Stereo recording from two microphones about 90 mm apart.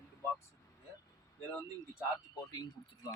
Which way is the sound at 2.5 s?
50° left (ahead or behind).